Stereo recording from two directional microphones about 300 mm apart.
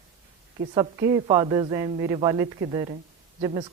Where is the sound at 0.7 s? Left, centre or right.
Centre.